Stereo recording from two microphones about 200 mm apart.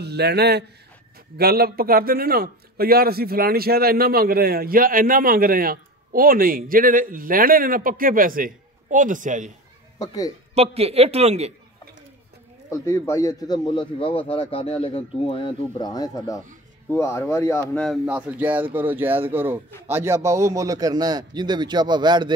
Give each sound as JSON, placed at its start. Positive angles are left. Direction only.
{"t": 0.0, "sound": "a man's voice", "side_deg": -55}
{"t": 9.9, "sound": "speech", "side_deg": 20}
{"t": 10.5, "sound": "a man's voice", "side_deg": -30}
{"t": 12.6, "sound": "a man's voice", "side_deg": 15}
{"t": 17.8, "sound": "a man's voice", "side_deg": -10}